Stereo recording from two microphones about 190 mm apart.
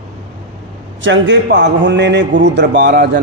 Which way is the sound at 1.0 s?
75° right (ahead or behind).